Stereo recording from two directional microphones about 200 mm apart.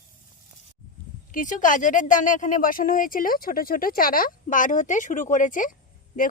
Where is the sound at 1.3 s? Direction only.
40° left (ahead or behind).